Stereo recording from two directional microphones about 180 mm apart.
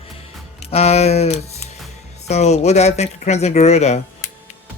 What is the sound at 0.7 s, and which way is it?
Speech, 35° left (ahead or behind).